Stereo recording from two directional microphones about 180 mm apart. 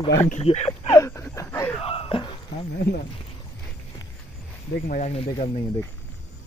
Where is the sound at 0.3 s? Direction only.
35° left (ahead or behind).